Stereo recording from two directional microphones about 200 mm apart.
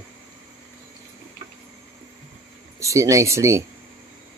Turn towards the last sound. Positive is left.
turn(degrees=-15)  # may be behind; listen again after turning